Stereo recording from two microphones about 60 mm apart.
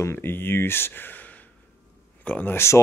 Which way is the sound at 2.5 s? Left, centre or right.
Left.